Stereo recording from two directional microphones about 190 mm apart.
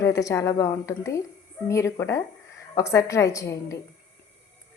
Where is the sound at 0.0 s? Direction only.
15° left (ahead or behind).